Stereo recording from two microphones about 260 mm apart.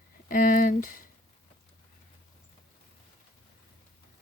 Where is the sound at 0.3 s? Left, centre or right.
Left.